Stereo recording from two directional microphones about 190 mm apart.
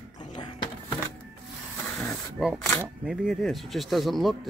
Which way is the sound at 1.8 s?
5° left (ahead or behind).